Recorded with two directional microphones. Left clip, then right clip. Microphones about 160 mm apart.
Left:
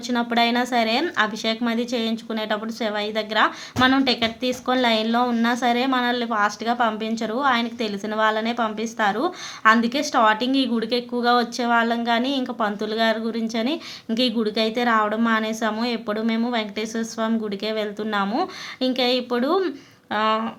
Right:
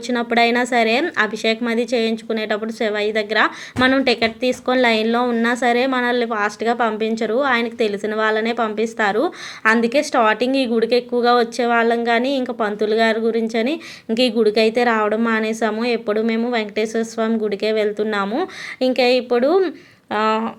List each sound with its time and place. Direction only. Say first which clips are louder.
0.1 s a woman's voice: right 4 dB; 20° right (ahead or behind)